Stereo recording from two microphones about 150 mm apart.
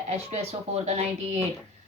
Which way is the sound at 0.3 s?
45° right (ahead or behind).